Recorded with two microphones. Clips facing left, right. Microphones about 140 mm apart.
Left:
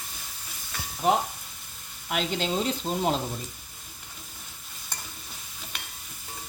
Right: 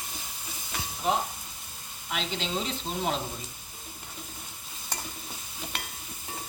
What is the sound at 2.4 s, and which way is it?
Speech, 40° left (ahead or behind).